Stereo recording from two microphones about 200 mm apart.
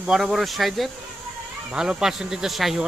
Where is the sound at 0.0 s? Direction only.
Centre (ahead or behind).